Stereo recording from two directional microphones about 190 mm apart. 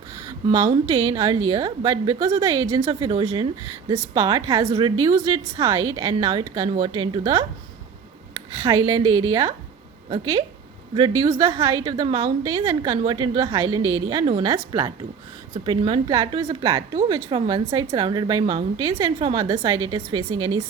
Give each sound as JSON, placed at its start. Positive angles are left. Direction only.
{"t": 0.3, "sound": "a woman's voice", "side_deg": -15}
{"t": 8.7, "sound": "a woman's voice", "side_deg": -25}
{"t": 10.1, "sound": "a woman's voice", "side_deg": -25}